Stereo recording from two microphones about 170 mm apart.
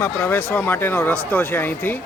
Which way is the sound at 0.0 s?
15° left (ahead or behind).